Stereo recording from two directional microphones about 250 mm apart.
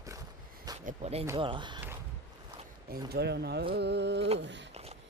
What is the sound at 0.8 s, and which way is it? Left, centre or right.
Speech, right.